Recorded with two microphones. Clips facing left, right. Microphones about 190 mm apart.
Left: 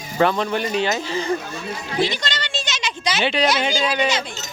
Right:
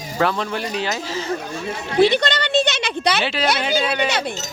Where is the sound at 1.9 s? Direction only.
60° right (ahead or behind).